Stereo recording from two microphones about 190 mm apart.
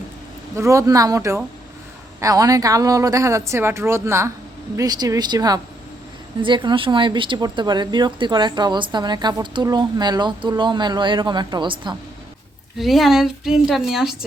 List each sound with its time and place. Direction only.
0.5 s speech: 15° right (ahead or behind)
12.7 s speech: centre (ahead or behind)